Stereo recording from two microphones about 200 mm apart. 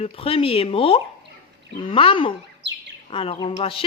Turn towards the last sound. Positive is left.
turn(degrees=25)  # may be behind; listen again after turning